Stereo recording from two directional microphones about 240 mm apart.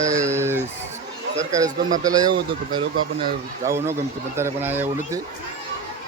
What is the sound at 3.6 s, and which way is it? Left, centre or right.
Speech, centre.